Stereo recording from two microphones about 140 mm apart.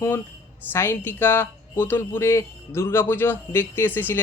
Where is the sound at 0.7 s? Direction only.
15° left (ahead or behind).